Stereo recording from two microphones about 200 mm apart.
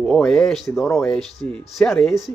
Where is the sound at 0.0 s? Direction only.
5° left (ahead or behind).